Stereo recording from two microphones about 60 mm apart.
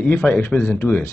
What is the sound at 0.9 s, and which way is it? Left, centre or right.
Speech, left.